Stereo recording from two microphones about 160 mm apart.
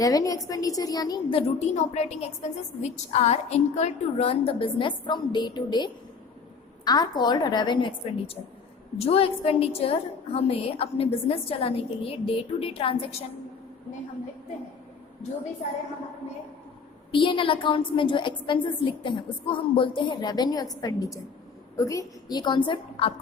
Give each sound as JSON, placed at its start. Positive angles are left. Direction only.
{"t": 0.0, "sound": "a woman's voice", "side_deg": 20}
{"t": 1.4, "sound": "a woman's voice", "side_deg": 40}
{"t": 17.1, "sound": "a woman's voice", "side_deg": 30}